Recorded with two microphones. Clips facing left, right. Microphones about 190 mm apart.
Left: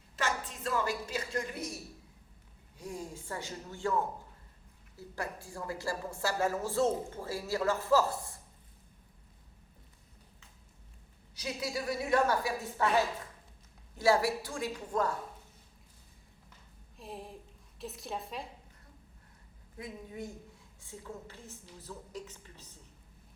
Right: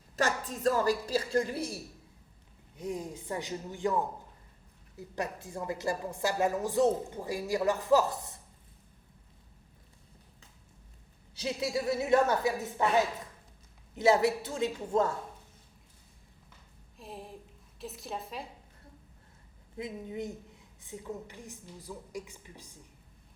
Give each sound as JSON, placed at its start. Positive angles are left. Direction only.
{"t": 0.2, "sound": "a woman's voice", "side_deg": -40}
{"t": 2.7, "sound": "a woman's voice", "side_deg": -20}
{"t": 11.3, "sound": "a woman's voice", "side_deg": -25}
{"t": 17.0, "sound": "a woman's voice", "side_deg": 0}
{"t": 19.7, "sound": "a woman's voice", "side_deg": -20}